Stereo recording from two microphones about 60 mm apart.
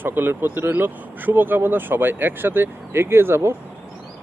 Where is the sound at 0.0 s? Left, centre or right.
Right.